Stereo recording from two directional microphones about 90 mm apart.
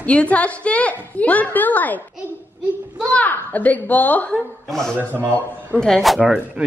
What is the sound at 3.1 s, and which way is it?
A woman's voice, 20° left (ahead or behind).